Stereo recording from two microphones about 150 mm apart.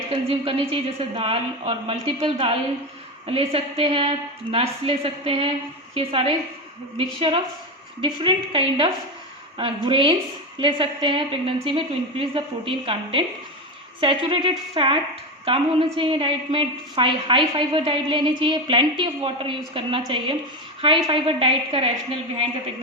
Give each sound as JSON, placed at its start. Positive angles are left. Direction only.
{"t": 0.1, "sound": "a woman's voice", "side_deg": -35}